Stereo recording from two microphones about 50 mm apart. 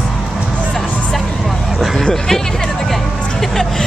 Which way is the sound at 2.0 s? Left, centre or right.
Centre.